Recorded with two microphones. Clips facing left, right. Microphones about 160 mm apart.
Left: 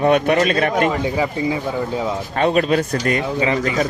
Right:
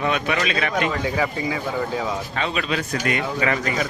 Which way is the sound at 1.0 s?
20° left (ahead or behind).